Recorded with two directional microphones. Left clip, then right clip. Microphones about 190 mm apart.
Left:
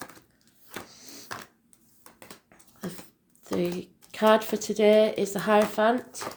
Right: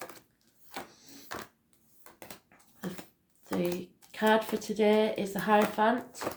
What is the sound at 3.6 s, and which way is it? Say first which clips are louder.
Speech: left 3 dB; 45° left (ahead or behind).